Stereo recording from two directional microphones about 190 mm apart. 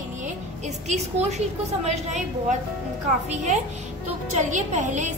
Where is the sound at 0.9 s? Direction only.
35° right (ahead or behind).